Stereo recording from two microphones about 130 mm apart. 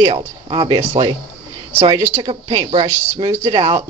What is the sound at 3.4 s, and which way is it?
Speech, 40° right (ahead or behind).